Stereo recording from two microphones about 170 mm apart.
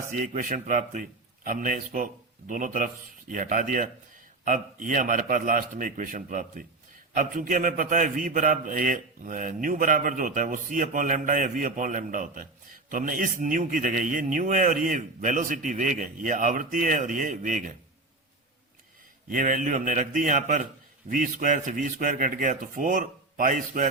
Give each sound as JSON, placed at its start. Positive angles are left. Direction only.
{"t": 0.3, "sound": "a man's voice", "side_deg": -50}
{"t": 19.3, "sound": "a man's voice", "side_deg": -50}